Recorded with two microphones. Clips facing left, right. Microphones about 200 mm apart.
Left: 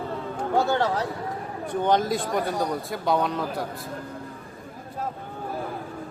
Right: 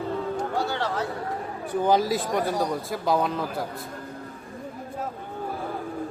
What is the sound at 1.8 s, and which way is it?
Speech, 5° right (ahead or behind).